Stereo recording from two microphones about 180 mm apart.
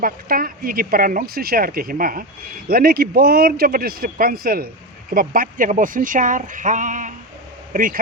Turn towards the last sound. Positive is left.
turn(degrees=-50)  # may be behind; listen again after turning